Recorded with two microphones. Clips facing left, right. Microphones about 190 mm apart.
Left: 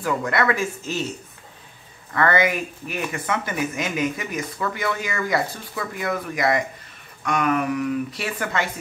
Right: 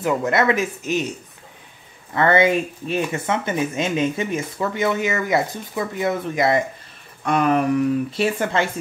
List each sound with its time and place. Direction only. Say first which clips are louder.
0.0 s speech: right 3 dB; 25° right (ahead or behind)
2.1 s speech: right 4 dB; 25° right (ahead or behind)